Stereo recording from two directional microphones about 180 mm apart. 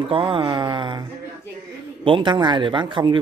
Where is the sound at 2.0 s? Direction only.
25° right (ahead or behind).